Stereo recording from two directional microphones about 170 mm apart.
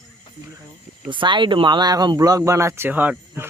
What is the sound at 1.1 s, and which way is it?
Speech, 30° right (ahead or behind).